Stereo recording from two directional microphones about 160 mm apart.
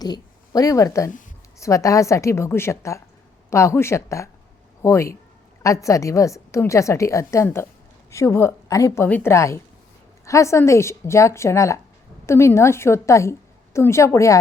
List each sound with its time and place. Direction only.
0.0 s a woman's voice: 25° left (ahead or behind)